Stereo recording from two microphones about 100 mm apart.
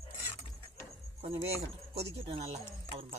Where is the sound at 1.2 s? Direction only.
90° right.